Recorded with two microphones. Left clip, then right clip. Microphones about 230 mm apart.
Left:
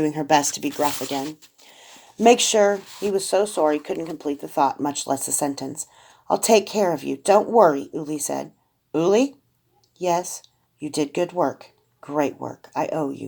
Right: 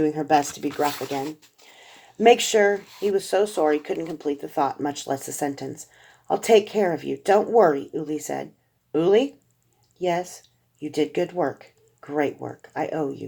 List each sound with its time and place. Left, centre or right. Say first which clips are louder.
0.2 s speech: left 1 dB; left
1.1 s speech: left 1 dB; left
2.2 s speech: left 1 dB; left
4.2 s speech: left 4 dB; left